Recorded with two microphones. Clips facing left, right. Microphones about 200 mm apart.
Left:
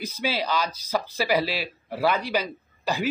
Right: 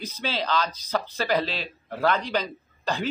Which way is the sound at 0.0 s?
10° left (ahead or behind).